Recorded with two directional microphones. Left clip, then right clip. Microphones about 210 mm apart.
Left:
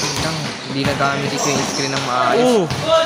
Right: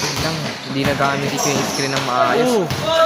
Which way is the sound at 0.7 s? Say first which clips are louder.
Even; 5° right (ahead or behind).